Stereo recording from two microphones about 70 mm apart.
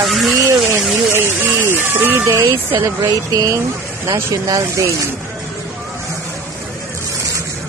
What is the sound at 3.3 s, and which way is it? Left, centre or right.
Speech, right.